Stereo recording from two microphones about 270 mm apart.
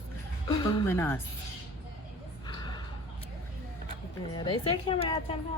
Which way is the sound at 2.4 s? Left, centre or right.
Centre.